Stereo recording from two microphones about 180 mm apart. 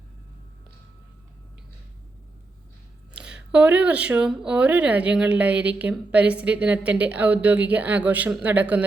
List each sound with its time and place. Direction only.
3.2 s speech: 5° right (ahead or behind)